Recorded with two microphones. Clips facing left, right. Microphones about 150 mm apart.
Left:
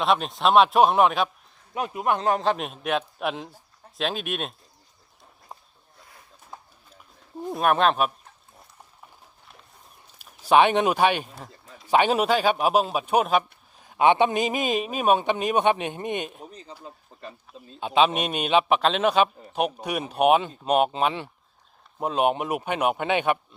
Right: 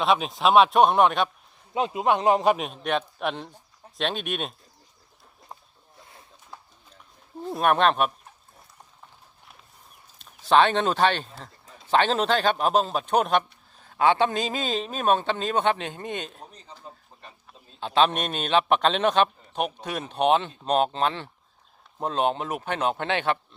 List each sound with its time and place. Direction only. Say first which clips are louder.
0.0 s speech: even; centre (ahead or behind)
1.7 s a man's voice: right 2 dB; 20° right (ahead or behind)
2.6 s speech: even; centre (ahead or behind)
5.5 s a sound: even; centre (ahead or behind)
7.5 s speech: even; centre (ahead or behind)
10.2 s speech: left 1 dB; 10° left (ahead or behind)